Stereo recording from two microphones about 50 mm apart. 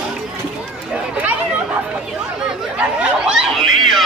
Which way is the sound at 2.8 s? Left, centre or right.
Right.